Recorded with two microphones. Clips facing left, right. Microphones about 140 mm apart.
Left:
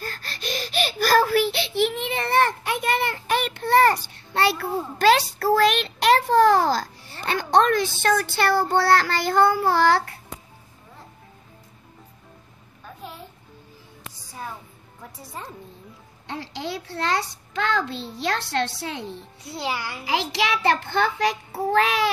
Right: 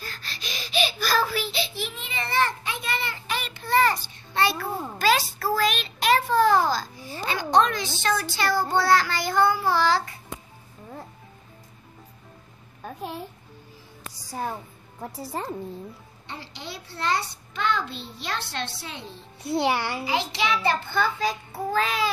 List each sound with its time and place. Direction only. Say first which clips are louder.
0.0 s a sound: left 5 dB; 50° left (ahead or behind)
8.3 s child singing: left 3 dB; 60° left (ahead or behind)
14.3 s a woman's voice: right 5 dB; 40° right (ahead or behind)
16.3 s a child's voice: left 7 dB; 90° left; by 19.0 s 70° left (ahead or behind)
19.5 s a child's voice: right 5 dB; 25° right (ahead or behind)
20.1 s a child's voice: left 3 dB; 90° left; by 22.1 s 70° left (ahead or behind)